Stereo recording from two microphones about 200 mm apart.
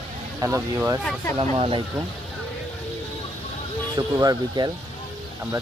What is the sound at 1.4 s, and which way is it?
Speech, 25° right (ahead or behind).